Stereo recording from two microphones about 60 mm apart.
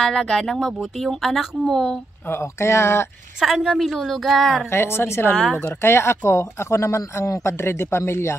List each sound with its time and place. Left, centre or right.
0.0 s a woman's voice: centre
2.4 s speech: left
3.3 s a woman's voice: centre
4.6 s speech: left